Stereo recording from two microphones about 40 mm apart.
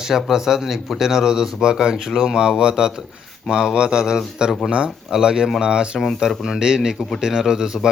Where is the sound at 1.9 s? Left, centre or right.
Centre.